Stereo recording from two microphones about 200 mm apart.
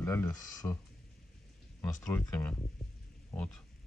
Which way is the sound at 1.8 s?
15° left (ahead or behind).